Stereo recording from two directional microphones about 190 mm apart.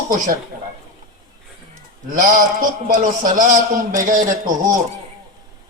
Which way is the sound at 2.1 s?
45° right (ahead or behind).